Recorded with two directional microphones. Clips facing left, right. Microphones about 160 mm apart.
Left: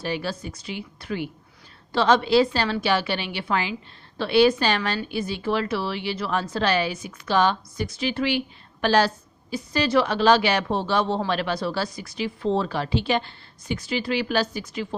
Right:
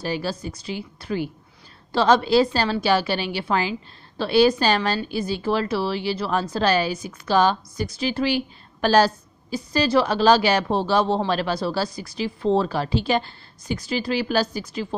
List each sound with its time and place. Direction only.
0.0 s a woman's voice: 35° right (ahead or behind)